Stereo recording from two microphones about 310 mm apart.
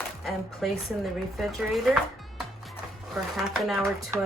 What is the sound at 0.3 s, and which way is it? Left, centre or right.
Speech, centre.